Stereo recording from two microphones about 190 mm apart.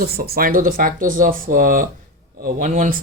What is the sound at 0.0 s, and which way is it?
Speech, 50° right (ahead or behind).